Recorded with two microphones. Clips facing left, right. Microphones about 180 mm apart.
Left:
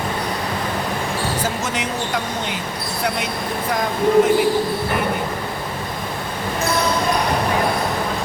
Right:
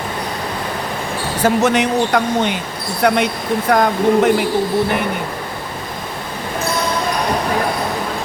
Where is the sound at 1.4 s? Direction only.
65° right (ahead or behind).